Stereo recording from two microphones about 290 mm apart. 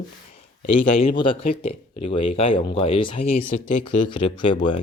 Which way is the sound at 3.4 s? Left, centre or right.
Left.